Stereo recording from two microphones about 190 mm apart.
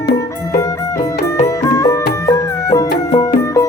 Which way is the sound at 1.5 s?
15° left (ahead or behind).